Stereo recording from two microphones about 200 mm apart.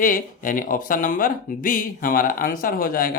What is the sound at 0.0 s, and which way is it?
Speech, 40° left (ahead or behind).